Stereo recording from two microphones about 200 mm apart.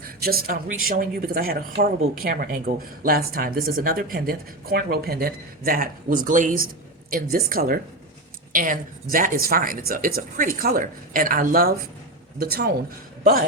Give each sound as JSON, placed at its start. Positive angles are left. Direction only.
{"t": 0.0, "sound": "speech", "side_deg": -50}